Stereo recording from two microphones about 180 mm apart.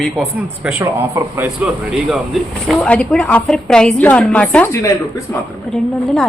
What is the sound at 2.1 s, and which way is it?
Speech, centre (ahead or behind).